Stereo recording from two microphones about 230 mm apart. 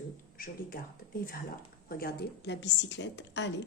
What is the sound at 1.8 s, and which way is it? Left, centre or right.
A woman's voice, left.